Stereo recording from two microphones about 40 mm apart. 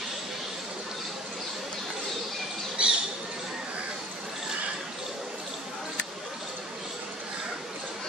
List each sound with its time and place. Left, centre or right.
2.8 s squawk: right